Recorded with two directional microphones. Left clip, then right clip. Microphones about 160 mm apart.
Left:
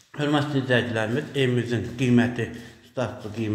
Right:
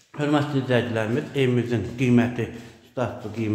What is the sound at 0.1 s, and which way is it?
Speech, 25° right (ahead or behind).